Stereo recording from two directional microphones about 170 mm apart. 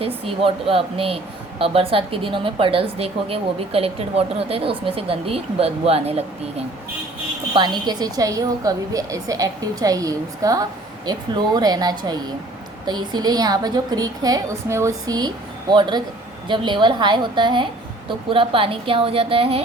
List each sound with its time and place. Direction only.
0.3 s a woman's voice: 35° right (ahead or behind)
7.5 s a woman's voice: 25° right (ahead or behind)